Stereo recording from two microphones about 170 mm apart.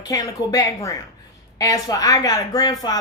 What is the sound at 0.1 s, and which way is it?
Speech, 20° left (ahead or behind).